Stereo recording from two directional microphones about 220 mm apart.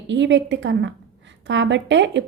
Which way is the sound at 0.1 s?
55° right (ahead or behind).